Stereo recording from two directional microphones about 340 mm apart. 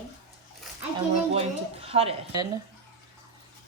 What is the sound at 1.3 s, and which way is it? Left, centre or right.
A woman's voice, centre.